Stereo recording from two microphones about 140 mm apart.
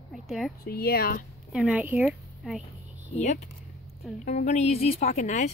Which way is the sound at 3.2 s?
60° left (ahead or behind).